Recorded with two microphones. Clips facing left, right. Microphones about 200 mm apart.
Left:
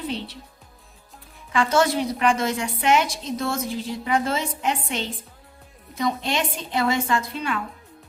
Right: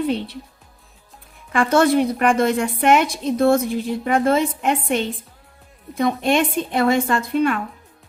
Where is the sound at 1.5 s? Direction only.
55° right (ahead or behind).